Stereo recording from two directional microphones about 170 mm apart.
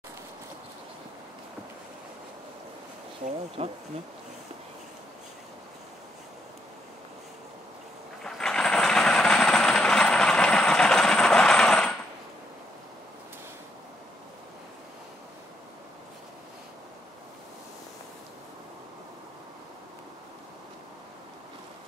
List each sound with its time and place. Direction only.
3.6 s speech: 35° right (ahead or behind)
8.2 s train: 5° left (ahead or behind)